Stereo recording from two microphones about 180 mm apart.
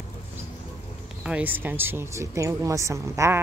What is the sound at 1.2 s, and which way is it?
Speech, 10° right (ahead or behind).